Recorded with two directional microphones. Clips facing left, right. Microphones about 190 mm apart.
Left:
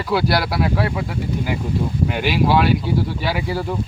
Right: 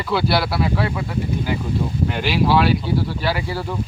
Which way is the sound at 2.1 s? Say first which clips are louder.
Even; 10° left (ahead or behind).